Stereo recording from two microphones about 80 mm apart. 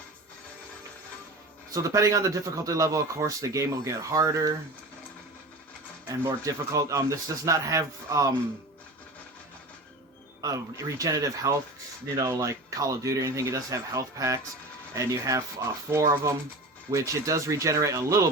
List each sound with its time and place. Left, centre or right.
1.7 s speech: right
6.1 s speech: right
10.4 s speech: right